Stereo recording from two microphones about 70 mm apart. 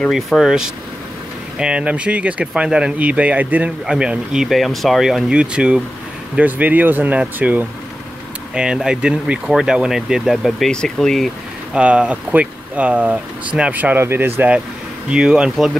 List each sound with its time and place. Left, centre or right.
0.1 s speech: centre; by 3.7 s right
3.8 s speech: centre
4.5 s speech: centre
6.4 s speech: right
8.7 s speech: centre
11.7 s speech: centre
15.0 s speech: centre
15.5 s speech: centre